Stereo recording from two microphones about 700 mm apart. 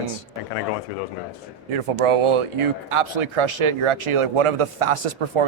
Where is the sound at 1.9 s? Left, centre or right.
Right.